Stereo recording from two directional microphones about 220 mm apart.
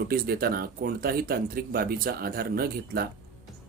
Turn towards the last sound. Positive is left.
turn(degrees=-45)  # may be behind; listen again after turning